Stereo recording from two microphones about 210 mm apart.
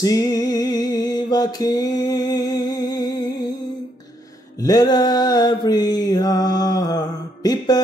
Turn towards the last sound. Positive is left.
turn(degrees=20)  # may be behind; listen again after turning